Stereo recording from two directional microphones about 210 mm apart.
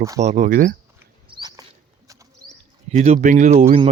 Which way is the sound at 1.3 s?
20° right (ahead or behind).